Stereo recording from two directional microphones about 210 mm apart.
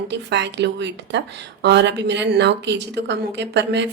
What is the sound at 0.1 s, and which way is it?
A woman's voice, 55° right (ahead or behind).